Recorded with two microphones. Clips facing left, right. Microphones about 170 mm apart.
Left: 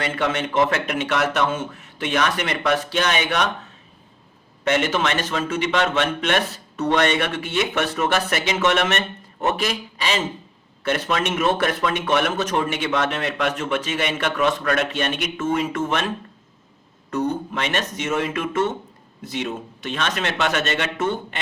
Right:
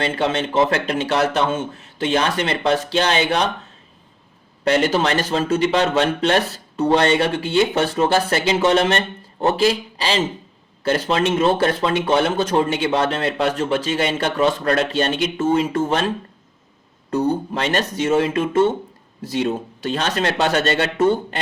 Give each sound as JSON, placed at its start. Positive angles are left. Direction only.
{"t": 0.0, "sound": "a man's voice", "side_deg": -30}
{"t": 4.6, "sound": "speech", "side_deg": -35}